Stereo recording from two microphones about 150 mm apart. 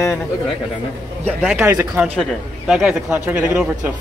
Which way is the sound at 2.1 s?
Centre (ahead or behind).